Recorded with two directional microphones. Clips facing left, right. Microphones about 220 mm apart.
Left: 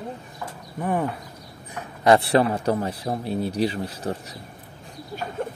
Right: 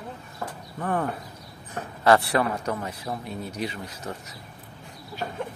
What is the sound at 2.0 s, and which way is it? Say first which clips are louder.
A man's voice: left 3 dB; 25° left (ahead or behind).